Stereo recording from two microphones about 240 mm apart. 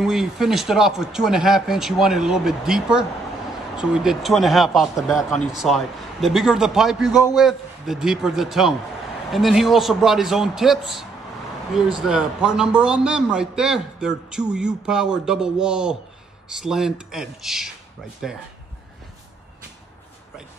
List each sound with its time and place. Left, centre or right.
0.0 s a man's voice: centre
7.1 s a man's voice: centre
7.3 s a man's voice: centre